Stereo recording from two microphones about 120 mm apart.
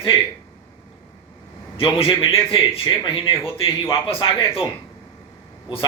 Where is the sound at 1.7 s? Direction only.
50° left (ahead or behind).